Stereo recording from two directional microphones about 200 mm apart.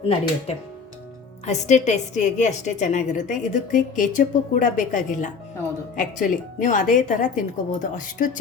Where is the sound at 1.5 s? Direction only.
35° left (ahead or behind).